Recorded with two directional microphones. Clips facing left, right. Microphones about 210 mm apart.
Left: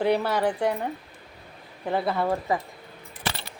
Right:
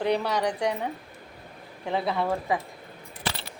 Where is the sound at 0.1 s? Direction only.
5° left (ahead or behind).